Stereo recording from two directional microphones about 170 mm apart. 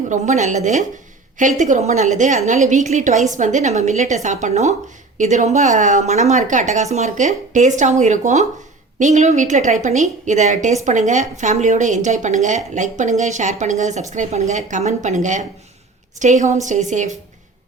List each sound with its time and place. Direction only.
0.1 s a woman's voice: 45° right (ahead or behind)